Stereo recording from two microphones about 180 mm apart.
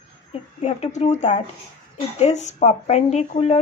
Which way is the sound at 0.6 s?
35° left (ahead or behind).